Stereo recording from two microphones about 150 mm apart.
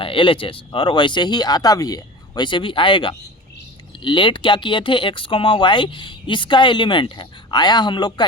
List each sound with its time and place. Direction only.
0.0 s speech: 35° left (ahead or behind)